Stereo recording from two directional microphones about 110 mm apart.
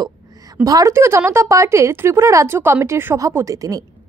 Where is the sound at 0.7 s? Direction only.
30° right (ahead or behind).